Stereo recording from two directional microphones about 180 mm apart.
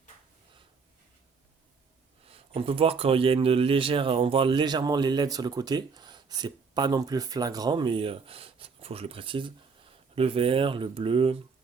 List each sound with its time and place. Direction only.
2.2 s speech: 35° right (ahead or behind)